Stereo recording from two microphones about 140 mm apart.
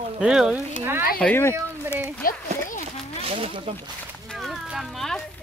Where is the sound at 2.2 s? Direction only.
90° left.